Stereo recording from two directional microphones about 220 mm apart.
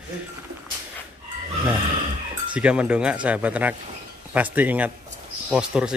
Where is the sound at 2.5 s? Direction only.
5° right (ahead or behind).